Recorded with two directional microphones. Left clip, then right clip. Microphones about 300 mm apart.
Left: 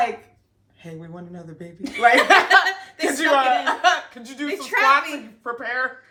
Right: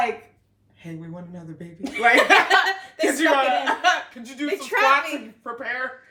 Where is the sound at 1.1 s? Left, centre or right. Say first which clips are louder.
Left 1 dB; centre.